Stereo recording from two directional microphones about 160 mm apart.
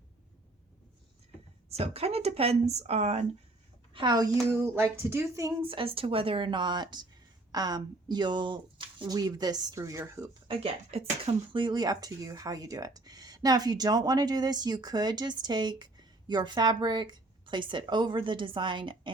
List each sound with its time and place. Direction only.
1.7 s speech: 40° right (ahead or behind)
3.9 s speech: 25° right (ahead or behind)
5.6 s speech: 35° right (ahead or behind)
10.5 s speech: 40° right (ahead or behind)